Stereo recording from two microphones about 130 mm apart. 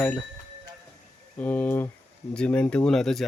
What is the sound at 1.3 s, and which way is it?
Speech, 10° left (ahead or behind).